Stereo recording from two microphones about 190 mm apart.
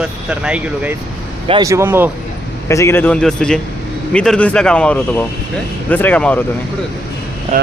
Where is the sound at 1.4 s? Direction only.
25° right (ahead or behind).